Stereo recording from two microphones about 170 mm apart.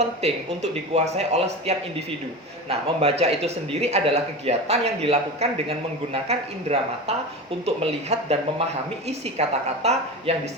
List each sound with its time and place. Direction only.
0.2 s a man's voice: 40° right (ahead or behind)